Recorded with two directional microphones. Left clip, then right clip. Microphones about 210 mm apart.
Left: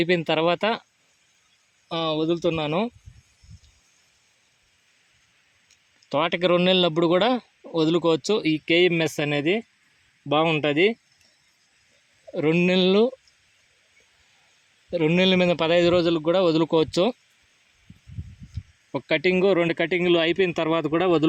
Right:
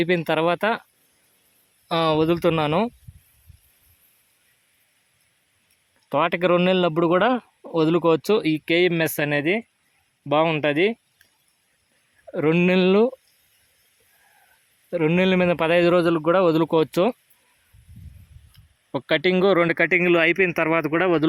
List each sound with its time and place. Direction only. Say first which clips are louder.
0.0 s speech: right 1 dB; 5° right (ahead or behind)
1.9 s speech: right 5 dB; 20° right (ahead or behind)
6.1 s speech: right 2 dB; 5° right (ahead or behind)
12.3 s speech: right 2 dB; 5° right (ahead or behind)
14.8 s speech: even; 5° right (ahead or behind)
18.9 s speech: right 2 dB; 5° right (ahead or behind)